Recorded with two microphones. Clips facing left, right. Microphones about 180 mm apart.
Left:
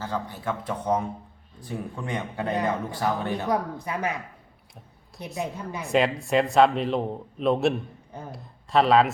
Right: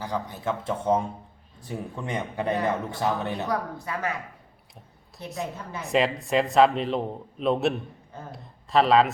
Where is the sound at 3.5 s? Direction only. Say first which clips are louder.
Left 2 dB; 20° left (ahead or behind).